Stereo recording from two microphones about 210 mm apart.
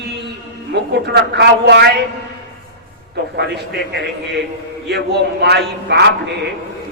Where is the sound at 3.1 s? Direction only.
50° right (ahead or behind).